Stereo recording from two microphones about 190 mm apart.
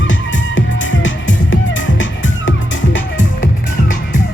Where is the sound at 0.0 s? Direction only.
80° left.